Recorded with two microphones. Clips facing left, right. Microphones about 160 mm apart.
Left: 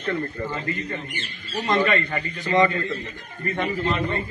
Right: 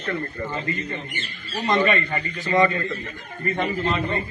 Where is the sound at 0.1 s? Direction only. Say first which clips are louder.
Left 1 dB; 5° left (ahead or behind).